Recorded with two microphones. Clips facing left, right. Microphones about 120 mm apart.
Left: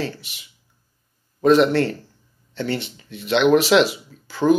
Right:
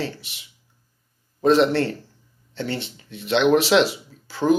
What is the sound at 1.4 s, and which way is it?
Speech, 25° right (ahead or behind).